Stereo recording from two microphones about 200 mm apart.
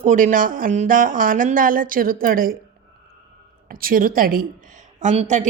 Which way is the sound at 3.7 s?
45° right (ahead or behind).